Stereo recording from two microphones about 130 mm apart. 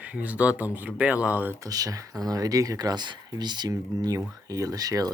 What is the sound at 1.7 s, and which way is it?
Speech, 30° right (ahead or behind).